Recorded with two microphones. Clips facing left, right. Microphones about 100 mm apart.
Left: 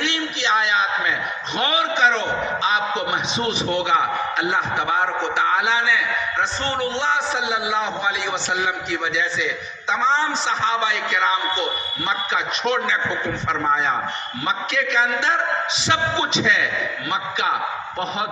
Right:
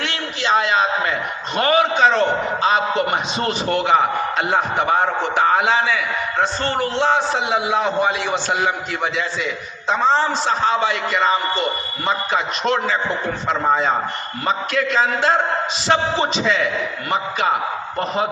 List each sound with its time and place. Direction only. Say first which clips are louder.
0.1 s a sound: right 2 dB; 40° right (ahead or behind)
2.6 s a man's voice: right 5 dB; 40° right (ahead or behind)
9.9 s a man's voice: right 3 dB; 45° right (ahead or behind)